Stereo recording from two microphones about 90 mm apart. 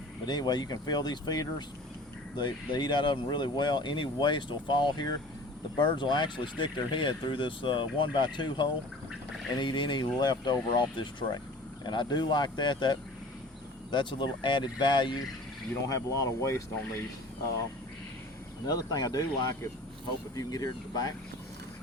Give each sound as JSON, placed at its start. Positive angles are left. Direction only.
{"t": 0.3, "sound": "speech", "side_deg": 50}
{"t": 15.9, "sound": "speech", "side_deg": 40}
{"t": 18.6, "sound": "speech", "side_deg": 45}